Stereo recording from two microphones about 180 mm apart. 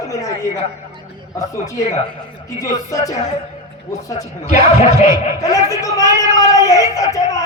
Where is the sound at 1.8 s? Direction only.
40° left (ahead or behind).